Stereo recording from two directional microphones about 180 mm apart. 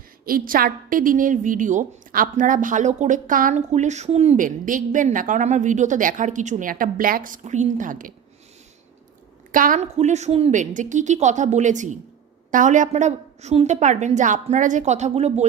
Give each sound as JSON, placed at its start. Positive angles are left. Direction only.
{"t": 0.3, "sound": "a woman's voice", "side_deg": -50}
{"t": 9.5, "sound": "a woman's voice", "side_deg": -50}